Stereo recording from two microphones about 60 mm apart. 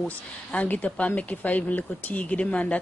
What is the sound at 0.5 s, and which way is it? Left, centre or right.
A man's voice, left.